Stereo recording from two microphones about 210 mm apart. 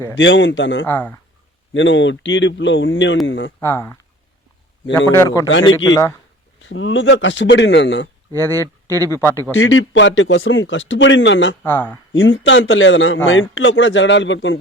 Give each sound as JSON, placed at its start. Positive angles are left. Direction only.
{"t": 0.2, "sound": "a man's voice", "side_deg": 60}
{"t": 0.9, "sound": "speech", "side_deg": 10}
{"t": 1.7, "sound": "a man's voice", "side_deg": 60}
{"t": 3.6, "sound": "speech", "side_deg": 10}
{"t": 5.0, "sound": "a man's voice", "side_deg": 15}
{"t": 6.6, "sound": "a man's voice", "side_deg": 60}
{"t": 8.4, "sound": "speech", "side_deg": 10}
{"t": 9.6, "sound": "a man's voice", "side_deg": 65}
{"t": 11.6, "sound": "speech", "side_deg": 10}
{"t": 12.1, "sound": "a man's voice", "side_deg": 65}